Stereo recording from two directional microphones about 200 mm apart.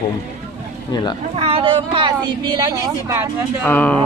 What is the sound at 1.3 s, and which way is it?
Speech, 30° right (ahead or behind).